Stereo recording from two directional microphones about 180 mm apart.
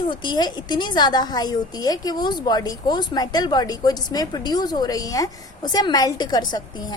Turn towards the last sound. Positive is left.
turn(degrees=25)  # may be behind; listen again after turning